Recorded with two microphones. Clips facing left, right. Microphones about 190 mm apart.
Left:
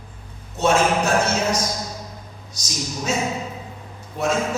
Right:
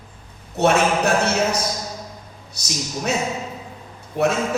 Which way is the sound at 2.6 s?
60° right (ahead or behind).